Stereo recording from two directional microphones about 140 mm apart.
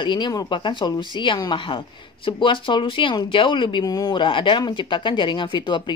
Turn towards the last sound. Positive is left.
turn(degrees=35)  # may be behind; listen again after turning